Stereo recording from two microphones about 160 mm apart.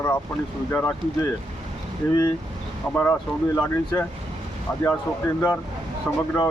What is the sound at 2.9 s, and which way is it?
Speech, 10° left (ahead or behind).